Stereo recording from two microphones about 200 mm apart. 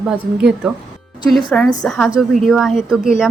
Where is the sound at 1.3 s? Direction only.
Centre (ahead or behind).